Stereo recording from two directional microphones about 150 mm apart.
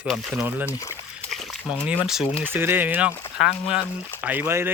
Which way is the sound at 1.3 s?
Centre (ahead or behind).